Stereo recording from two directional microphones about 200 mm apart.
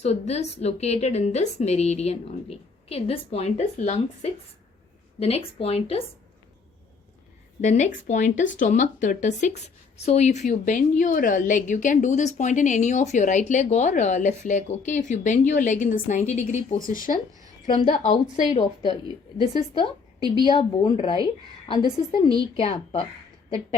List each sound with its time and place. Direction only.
0.0 s speech: 30° left (ahead or behind)
7.6 s speech: 35° left (ahead or behind)
18.8 s speech: 20° right (ahead or behind)
19.4 s a woman's voice: 25° left (ahead or behind)
20.2 s speech: 20° right (ahead or behind)
20.5 s speech: 25° left (ahead or behind)